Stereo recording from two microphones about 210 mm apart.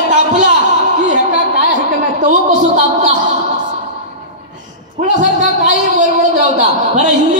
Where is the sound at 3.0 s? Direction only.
35° right (ahead or behind).